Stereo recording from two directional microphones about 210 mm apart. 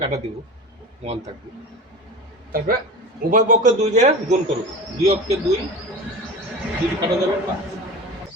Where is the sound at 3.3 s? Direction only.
35° right (ahead or behind).